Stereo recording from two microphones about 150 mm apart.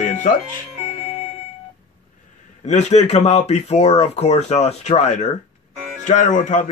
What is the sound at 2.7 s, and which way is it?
A man's voice, 50° left (ahead or behind).